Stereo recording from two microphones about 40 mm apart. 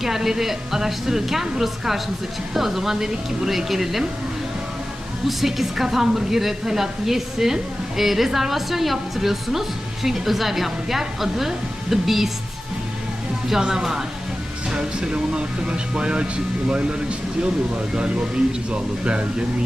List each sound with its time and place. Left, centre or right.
0.0 s speech: centre
5.4 s speech: centre
13.5 s speech: centre